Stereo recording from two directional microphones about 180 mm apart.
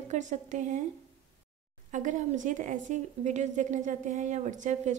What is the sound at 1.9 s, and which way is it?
A woman's voice, 45° right (ahead or behind).